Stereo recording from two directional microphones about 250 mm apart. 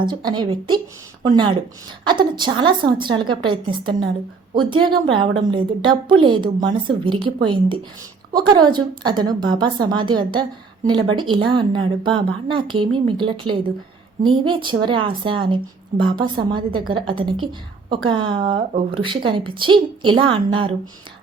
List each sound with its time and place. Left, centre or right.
0.0 s a woman's voice: centre